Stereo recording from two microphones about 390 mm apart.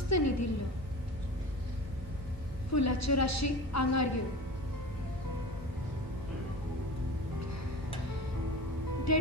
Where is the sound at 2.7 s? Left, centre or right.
Left.